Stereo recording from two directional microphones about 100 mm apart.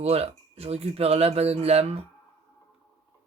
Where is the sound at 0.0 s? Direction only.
90° right.